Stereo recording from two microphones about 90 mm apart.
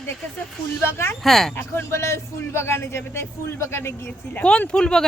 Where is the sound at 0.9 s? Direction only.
30° left (ahead or behind).